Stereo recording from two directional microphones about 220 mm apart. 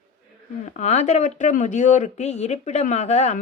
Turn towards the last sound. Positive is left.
turn(degrees=30)  # may be behind; listen again after turning